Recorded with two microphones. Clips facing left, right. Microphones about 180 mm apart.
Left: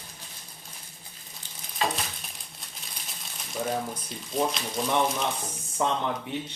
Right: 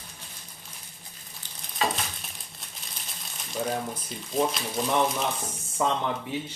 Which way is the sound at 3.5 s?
Centre (ahead or behind).